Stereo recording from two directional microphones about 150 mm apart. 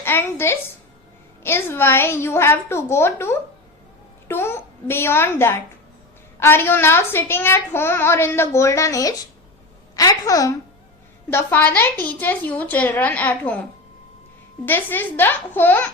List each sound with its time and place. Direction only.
0.0 s a woman's voice: 15° left (ahead or behind)
14.6 s a woman's voice: 15° left (ahead or behind)